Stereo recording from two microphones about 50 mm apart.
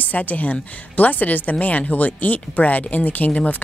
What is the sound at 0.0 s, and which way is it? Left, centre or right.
A woman's voice, left.